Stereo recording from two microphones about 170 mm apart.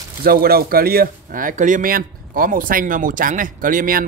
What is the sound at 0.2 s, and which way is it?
Speech, 60° right (ahead or behind).